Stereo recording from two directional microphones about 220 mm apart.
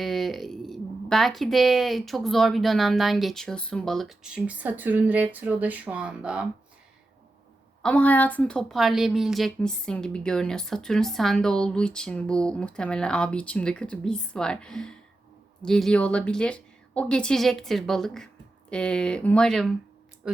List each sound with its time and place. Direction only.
0.0 s a woman's voice: centre (ahead or behind)
7.8 s a woman's voice: 5° left (ahead or behind)